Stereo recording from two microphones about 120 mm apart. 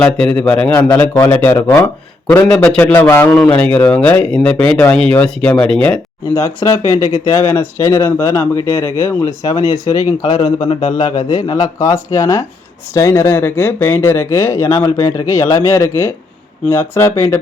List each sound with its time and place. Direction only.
0.2 s speech: 5° left (ahead or behind)
0.7 s a man's voice: 35° left (ahead or behind)
0.9 s speech: 20° left (ahead or behind)
6.3 s speech: 25° left (ahead or behind)